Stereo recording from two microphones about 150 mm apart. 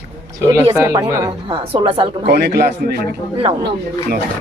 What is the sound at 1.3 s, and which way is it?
A woman's voice, 35° right (ahead or behind).